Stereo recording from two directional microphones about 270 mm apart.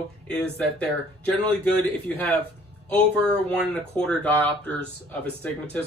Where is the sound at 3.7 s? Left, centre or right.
Centre.